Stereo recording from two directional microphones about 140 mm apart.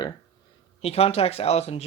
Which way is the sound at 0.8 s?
45° left (ahead or behind).